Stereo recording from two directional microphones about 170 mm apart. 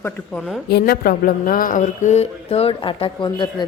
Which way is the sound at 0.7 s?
65° left (ahead or behind).